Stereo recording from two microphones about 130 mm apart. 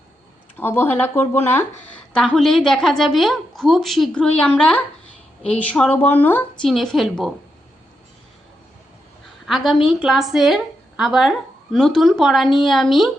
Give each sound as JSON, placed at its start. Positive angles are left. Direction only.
{"t": 0.5, "sound": "speech", "side_deg": 15}
{"t": 2.1, "sound": "a woman's voice", "side_deg": 5}
{"t": 6.6, "sound": "a woman's voice", "side_deg": 5}
{"t": 9.5, "sound": "a woman's voice", "side_deg": 0}